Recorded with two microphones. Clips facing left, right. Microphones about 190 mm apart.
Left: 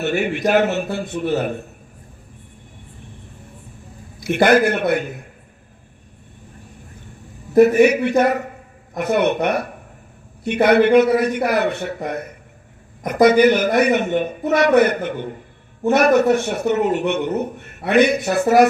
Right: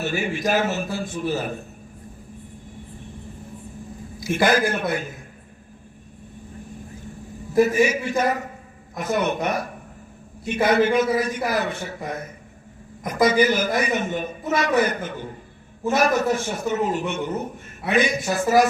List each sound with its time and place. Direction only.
0.0 s a man's voice: 65° left (ahead or behind)
4.2 s a man's voice: 65° left (ahead or behind)
7.5 s a man's voice: 65° left (ahead or behind)